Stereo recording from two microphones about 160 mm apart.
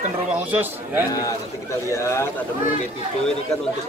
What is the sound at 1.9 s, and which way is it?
Speech, 20° left (ahead or behind).